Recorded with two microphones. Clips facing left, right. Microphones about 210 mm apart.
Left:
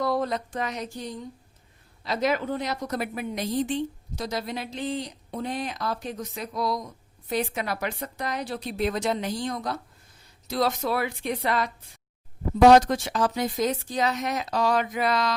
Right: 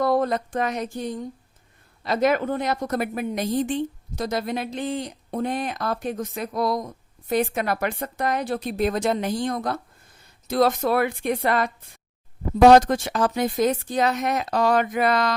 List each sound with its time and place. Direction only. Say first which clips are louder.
0.0 s a woman's voice: right 5 dB; 55° right (ahead or behind)